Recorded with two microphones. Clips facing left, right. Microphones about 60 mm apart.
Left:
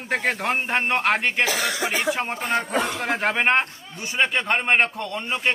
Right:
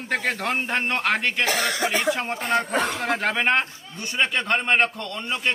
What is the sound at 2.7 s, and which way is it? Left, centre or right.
Speech, right.